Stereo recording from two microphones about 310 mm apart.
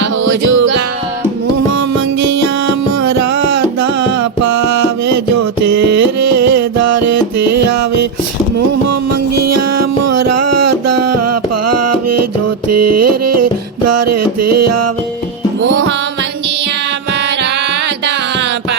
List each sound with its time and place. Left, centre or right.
0.0 s music: right
3.0 s music: right
9.5 s music: right
15.6 s music: right